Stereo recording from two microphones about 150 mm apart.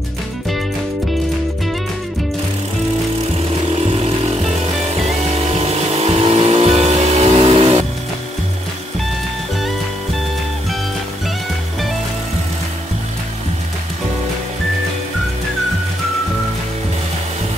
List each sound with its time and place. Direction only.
3.8 s vehicle: 45° right (ahead or behind)
5.5 s vehicle: 45° right (ahead or behind)